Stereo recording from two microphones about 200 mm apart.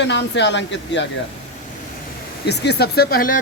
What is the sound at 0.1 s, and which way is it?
Speech, 60° left (ahead or behind).